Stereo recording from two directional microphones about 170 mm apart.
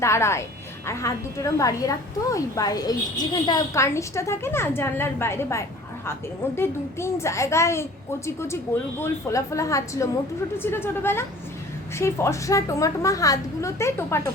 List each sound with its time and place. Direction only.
0.0 s a woman's voice: 15° left (ahead or behind)
9.0 s a woman's voice: 15° left (ahead or behind)